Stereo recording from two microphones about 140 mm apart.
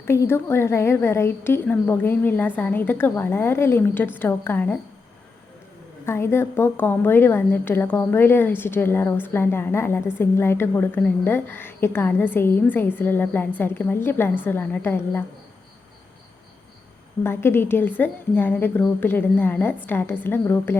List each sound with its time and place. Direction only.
0.0 s a woman's voice: 15° left (ahead or behind)
6.1 s a woman's voice: 15° left (ahead or behind)
17.2 s a woman's voice: 15° left (ahead or behind)